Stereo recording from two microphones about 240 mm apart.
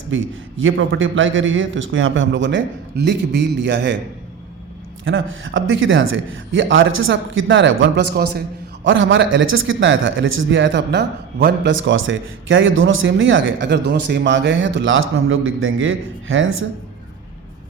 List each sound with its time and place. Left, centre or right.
0.1 s a man's voice: right
5.0 s a man's voice: right